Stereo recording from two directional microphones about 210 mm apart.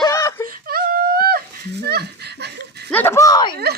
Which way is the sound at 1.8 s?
50° right (ahead or behind).